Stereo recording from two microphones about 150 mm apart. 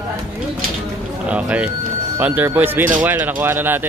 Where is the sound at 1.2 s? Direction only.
10° right (ahead or behind).